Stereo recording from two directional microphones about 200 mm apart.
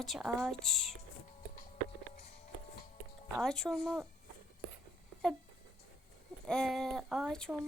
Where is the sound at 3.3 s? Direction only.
5° left (ahead or behind).